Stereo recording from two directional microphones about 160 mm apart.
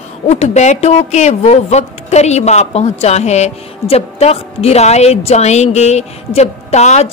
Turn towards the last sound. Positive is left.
turn(degrees=45)  # may be behind; listen again after turning